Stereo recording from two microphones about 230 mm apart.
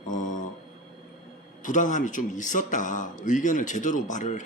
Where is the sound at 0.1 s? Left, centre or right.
Left.